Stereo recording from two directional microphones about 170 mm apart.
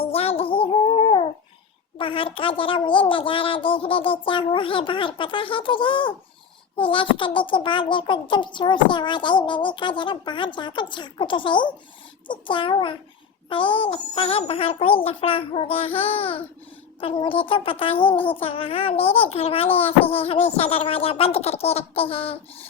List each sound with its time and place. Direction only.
0.0 s music: 35° left (ahead or behind)
2.0 s a woman's voice: 30° left (ahead or behind)